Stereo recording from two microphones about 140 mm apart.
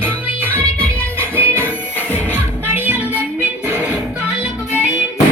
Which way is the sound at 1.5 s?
15° left (ahead or behind).